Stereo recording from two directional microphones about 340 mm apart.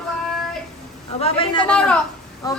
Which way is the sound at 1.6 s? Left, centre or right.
Centre.